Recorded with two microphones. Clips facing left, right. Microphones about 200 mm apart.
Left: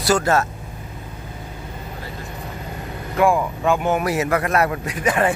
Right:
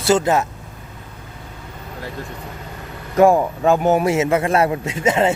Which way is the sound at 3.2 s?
40° right (ahead or behind).